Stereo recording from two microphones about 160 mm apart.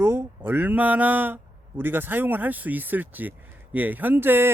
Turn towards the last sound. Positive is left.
turn(degrees=-15)  # may be behind; listen again after turning